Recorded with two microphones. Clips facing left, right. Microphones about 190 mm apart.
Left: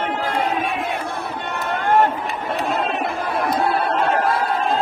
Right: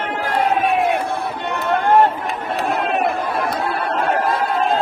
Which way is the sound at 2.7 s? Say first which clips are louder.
Right 5 dB; 60° right (ahead or behind).